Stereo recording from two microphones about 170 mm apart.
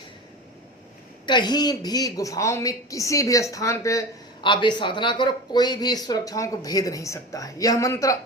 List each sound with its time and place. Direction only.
1.3 s a woman's voice: 25° left (ahead or behind)